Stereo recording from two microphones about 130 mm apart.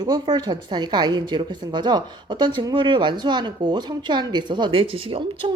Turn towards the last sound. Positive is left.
turn(degrees=-45)  # may be behind; listen again after turning